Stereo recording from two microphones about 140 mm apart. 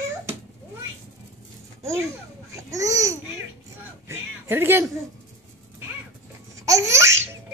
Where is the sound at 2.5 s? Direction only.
25° right (ahead or behind).